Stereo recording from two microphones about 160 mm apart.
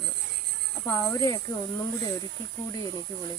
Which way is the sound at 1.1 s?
20° left (ahead or behind).